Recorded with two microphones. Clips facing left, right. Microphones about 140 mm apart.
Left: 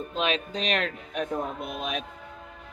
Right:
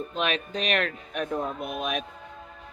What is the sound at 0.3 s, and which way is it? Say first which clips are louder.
Speech: left 1 dB; 35° left (ahead or behind).